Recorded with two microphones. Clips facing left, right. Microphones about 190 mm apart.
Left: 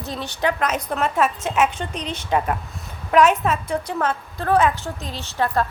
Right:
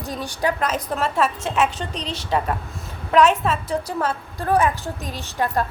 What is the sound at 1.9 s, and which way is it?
Speech, 45° left (ahead or behind).